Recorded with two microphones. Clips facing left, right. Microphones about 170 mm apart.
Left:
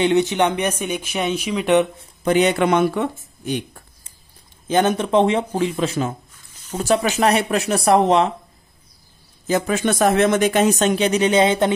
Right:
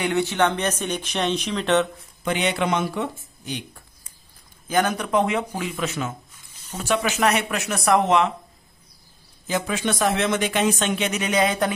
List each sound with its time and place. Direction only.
0.0 s speech: 20° left (ahead or behind)
2.2 s speech: 45° left (ahead or behind)
4.6 s speech: 25° left (ahead or behind)
9.5 s speech: 45° left (ahead or behind); by 11.7 s 25° left (ahead or behind)